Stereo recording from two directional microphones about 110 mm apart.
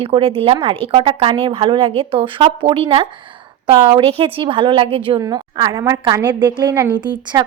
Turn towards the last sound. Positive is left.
turn(degrees=-45)  # may be behind; listen again after turning